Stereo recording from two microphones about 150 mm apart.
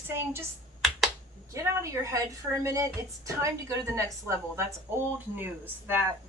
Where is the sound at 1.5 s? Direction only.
20° right (ahead or behind).